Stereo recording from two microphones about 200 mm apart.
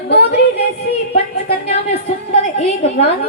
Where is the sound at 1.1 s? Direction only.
30° left (ahead or behind).